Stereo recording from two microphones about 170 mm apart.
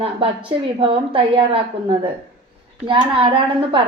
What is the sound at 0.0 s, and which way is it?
A woman's voice, 35° right (ahead or behind).